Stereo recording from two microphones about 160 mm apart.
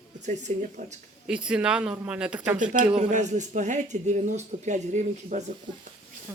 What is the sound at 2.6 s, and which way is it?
A man's voice, 55° right (ahead or behind).